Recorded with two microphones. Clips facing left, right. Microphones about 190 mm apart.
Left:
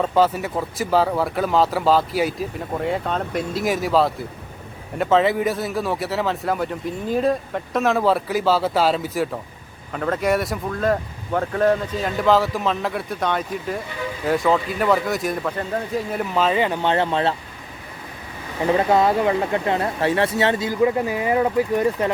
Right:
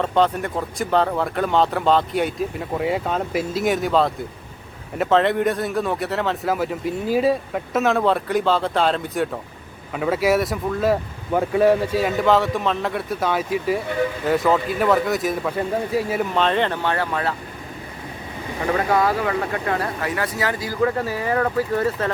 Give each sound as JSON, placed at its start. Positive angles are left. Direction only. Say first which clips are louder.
{"t": 0.0, "sound": "speech", "louder": "left 1 dB", "side_deg": 5}
{"t": 18.6, "sound": "speech", "louder": "left 3 dB", "side_deg": 25}